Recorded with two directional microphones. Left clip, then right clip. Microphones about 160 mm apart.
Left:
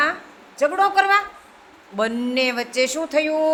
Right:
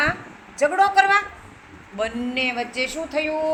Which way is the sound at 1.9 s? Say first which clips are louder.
Left 3 dB; 35° left (ahead or behind).